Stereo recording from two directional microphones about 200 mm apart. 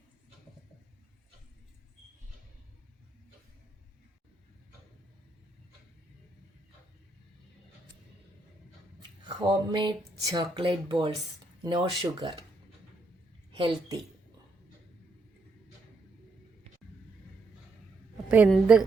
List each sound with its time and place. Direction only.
9.2 s a sound: 20° right (ahead or behind)
13.5 s speech: 20° right (ahead or behind)
18.3 s a woman's voice: 10° right (ahead or behind)